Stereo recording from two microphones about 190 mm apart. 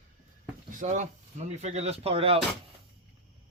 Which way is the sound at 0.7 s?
40° right (ahead or behind).